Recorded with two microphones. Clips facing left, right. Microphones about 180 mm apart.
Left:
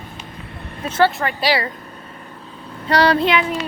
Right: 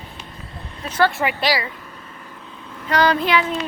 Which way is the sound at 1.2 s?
10° right (ahead or behind).